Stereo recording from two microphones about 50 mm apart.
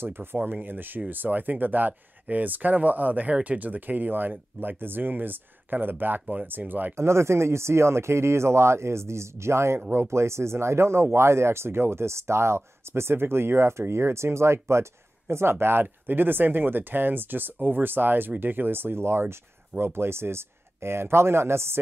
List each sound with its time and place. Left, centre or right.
0.0 s speech: right
0.4 s speech: right
7.0 s speech: right